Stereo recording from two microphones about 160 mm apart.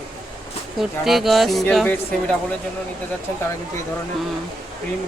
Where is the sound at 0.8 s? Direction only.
Centre (ahead or behind).